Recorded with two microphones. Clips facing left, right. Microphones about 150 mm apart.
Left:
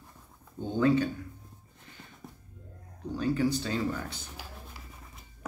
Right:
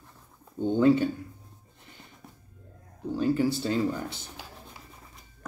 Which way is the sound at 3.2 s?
25° right (ahead or behind).